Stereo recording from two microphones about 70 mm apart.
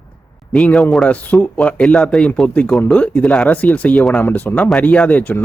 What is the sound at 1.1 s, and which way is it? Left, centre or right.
Speech, centre.